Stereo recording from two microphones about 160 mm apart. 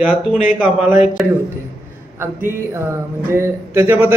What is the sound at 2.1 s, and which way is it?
Music, 15° right (ahead or behind).